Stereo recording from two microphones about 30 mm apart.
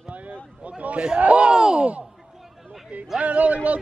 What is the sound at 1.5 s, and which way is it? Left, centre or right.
Speech, right.